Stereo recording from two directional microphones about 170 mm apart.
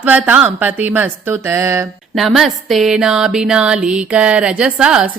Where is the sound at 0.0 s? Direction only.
10° right (ahead or behind).